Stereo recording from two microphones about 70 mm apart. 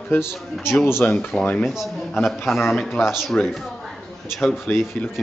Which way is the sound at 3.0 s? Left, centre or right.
Centre.